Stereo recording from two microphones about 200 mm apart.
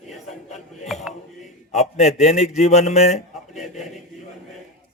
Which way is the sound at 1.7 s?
35° left (ahead or behind).